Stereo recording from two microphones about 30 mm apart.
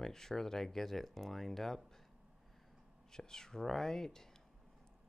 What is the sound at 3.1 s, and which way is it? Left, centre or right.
Speech, centre.